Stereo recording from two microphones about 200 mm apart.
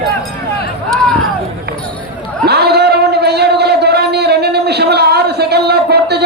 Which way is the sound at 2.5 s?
55° right (ahead or behind).